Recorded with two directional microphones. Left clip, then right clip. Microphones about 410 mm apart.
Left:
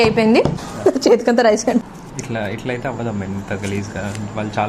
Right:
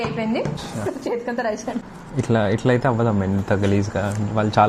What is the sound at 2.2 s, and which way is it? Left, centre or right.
Speech, right.